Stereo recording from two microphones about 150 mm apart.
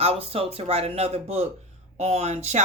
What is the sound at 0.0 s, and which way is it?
Speech, 40° right (ahead or behind).